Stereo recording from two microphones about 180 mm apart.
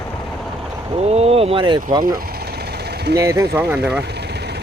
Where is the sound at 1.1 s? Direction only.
35° right (ahead or behind).